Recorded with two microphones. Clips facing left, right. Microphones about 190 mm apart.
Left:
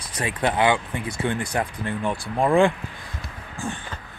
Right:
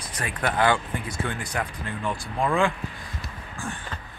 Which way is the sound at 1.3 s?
30° left (ahead or behind).